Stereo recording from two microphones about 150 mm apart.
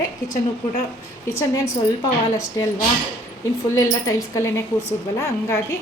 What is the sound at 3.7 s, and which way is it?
Speech, 20° left (ahead or behind).